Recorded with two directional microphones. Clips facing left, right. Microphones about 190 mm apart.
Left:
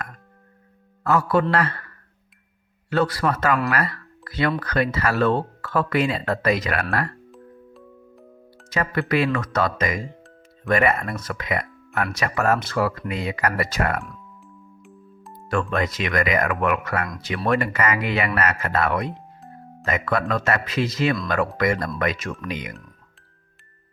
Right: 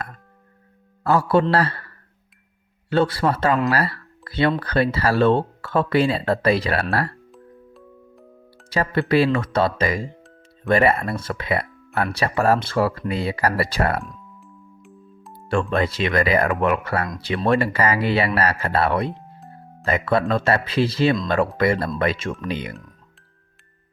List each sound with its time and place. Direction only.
1.0 s a man's voice: 30° right (ahead or behind)
7.3 s music: centre (ahead or behind)
8.7 s speech: 30° right (ahead or behind)
14.0 s music: centre (ahead or behind)
15.4 s speech: 30° right (ahead or behind)